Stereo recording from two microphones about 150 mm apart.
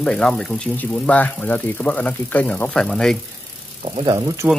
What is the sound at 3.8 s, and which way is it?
Speech, 35° right (ahead or behind).